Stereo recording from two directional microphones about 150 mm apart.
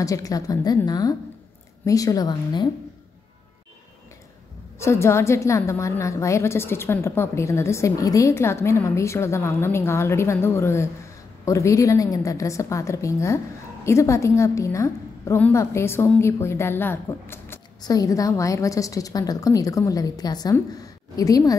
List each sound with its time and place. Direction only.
0.0 s a woman's voice: 25° left (ahead or behind)
4.7 s a woman's voice: 20° left (ahead or behind)